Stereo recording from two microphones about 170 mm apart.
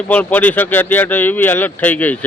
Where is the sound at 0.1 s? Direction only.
10° left (ahead or behind).